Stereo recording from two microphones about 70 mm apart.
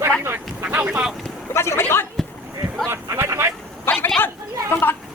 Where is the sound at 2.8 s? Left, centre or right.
Right.